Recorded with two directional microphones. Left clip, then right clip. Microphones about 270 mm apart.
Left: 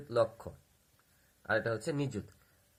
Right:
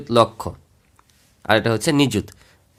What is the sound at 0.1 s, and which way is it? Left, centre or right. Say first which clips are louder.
Speech: right 15 dB; right.